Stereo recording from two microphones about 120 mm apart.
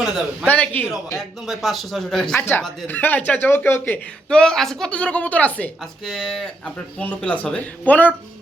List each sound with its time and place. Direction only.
0.4 s a man's voice: 15° left (ahead or behind)
1.5 s speech: centre (ahead or behind)
2.4 s a man's voice: 20° left (ahead or behind)